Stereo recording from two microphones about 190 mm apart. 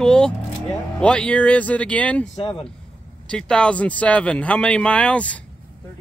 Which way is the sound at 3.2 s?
5° left (ahead or behind).